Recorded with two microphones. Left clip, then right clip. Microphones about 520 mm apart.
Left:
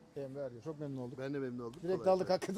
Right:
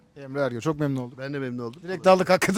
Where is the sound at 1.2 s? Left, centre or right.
Right.